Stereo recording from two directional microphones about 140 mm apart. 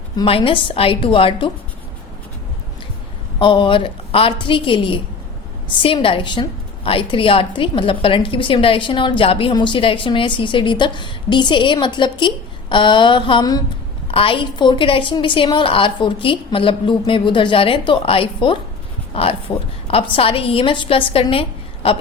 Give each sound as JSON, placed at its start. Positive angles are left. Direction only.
{"t": 0.3, "sound": "a woman's voice", "side_deg": 40}
{"t": 3.4, "sound": "a woman's voice", "side_deg": 35}